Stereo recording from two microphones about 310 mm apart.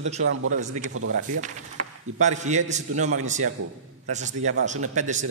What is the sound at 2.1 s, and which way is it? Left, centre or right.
Speech, right.